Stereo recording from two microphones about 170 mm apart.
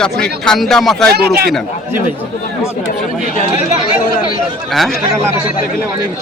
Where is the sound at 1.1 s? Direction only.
70° right (ahead or behind).